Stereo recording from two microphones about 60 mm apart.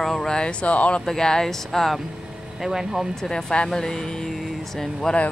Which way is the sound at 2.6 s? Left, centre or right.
Centre.